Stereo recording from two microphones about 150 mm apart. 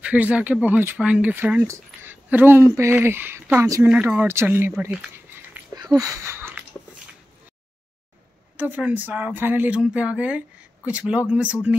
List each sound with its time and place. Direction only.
0.0 s speech: 10° right (ahead or behind)
8.5 s speech: 10° right (ahead or behind)